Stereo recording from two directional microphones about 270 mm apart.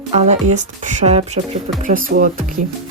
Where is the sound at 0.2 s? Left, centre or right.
Right.